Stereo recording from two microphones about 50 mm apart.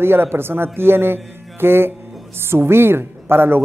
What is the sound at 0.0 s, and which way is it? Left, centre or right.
Speech, right.